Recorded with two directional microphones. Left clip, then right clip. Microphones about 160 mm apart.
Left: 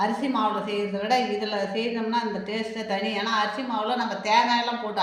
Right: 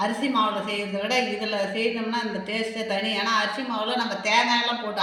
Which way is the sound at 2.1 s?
Centre (ahead or behind).